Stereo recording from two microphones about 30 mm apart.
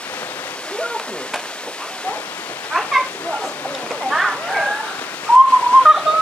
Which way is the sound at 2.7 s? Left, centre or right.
Left.